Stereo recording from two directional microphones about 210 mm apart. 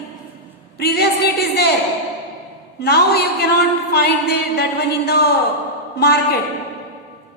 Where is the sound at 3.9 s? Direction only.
50° left (ahead or behind).